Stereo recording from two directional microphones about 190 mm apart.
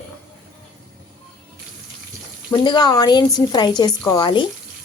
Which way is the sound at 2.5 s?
25° left (ahead or behind).